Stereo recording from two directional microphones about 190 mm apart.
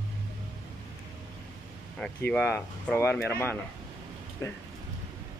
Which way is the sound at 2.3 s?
5° left (ahead or behind).